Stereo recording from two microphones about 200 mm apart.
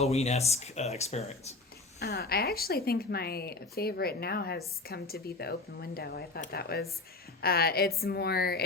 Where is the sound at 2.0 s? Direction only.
55° left (ahead or behind).